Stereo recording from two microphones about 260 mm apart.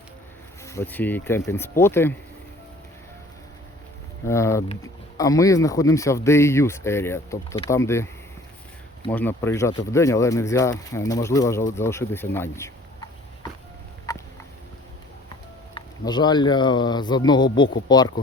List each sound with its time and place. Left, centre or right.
0.6 s speech: centre
4.3 s speech: centre
14.1 s a sound: centre
15.7 s speech: centre